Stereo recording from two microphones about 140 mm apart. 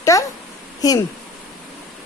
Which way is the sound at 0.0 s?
25° left (ahead or behind).